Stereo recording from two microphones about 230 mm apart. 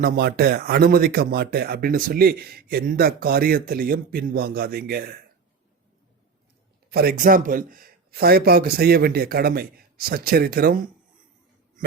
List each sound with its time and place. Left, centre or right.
0.0 s speech: right
6.9 s speech: right